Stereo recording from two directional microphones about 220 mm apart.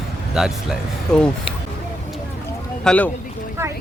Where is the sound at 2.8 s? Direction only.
5° left (ahead or behind).